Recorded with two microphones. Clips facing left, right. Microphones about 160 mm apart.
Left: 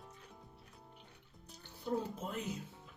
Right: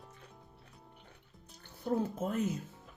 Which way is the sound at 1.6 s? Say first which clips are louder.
Right 5 dB; 50° right (ahead or behind).